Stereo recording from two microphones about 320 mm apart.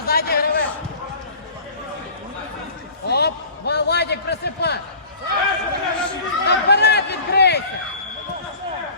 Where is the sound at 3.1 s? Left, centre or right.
Left.